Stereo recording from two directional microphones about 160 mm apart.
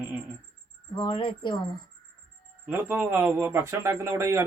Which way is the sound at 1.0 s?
30° left (ahead or behind).